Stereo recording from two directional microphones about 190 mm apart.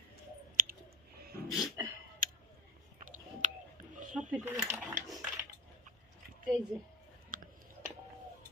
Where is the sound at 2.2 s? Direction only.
45° right (ahead or behind).